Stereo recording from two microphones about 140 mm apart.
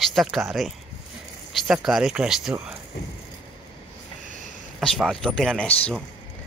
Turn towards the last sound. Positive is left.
turn(degrees=5)  # may be behind; listen again after turning